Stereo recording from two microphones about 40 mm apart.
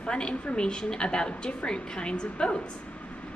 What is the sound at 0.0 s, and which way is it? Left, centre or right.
A woman's voice, left.